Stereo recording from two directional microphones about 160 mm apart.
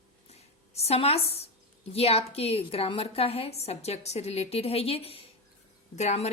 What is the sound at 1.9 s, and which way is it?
A woman's voice, 40° left (ahead or behind).